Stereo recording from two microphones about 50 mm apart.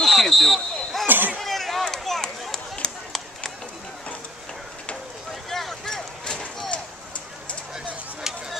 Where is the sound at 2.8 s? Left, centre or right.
Centre.